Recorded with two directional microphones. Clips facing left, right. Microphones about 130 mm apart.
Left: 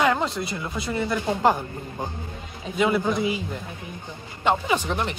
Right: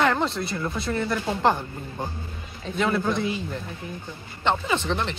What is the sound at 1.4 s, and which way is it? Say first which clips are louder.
Speech: left 1 dB; 5° left (ahead or behind).